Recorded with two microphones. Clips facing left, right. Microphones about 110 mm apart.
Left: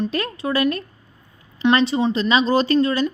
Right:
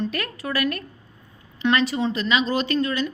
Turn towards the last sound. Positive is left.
turn(degrees=30)  # may be behind; listen again after turning